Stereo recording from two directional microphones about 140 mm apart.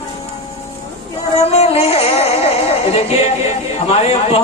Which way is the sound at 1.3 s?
50° left (ahead or behind).